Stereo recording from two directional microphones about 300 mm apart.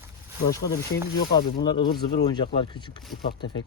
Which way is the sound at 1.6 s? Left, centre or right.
Centre.